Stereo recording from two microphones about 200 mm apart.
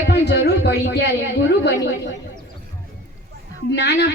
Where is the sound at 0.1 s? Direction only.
55° left (ahead or behind).